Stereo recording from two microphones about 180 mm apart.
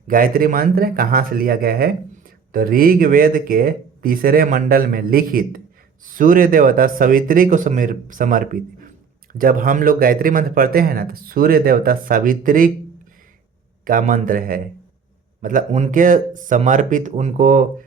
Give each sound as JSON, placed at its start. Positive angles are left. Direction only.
{"t": 0.1, "sound": "speech", "side_deg": -50}
{"t": 13.8, "sound": "speech", "side_deg": -50}